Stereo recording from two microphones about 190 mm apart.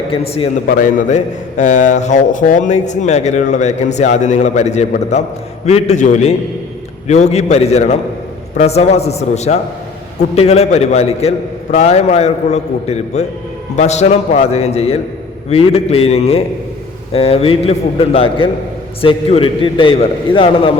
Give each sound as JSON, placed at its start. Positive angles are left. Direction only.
{"t": 0.1, "sound": "a man's voice", "side_deg": 30}
{"t": 0.8, "sound": "a man's voice", "side_deg": 40}